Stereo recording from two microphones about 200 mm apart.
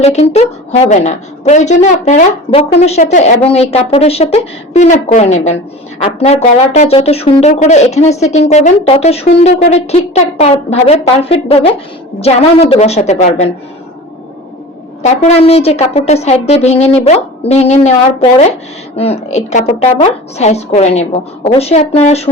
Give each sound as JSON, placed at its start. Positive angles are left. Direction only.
{"t": 0.0, "sound": "a woman's voice", "side_deg": 30}
{"t": 15.0, "sound": "speech", "side_deg": 30}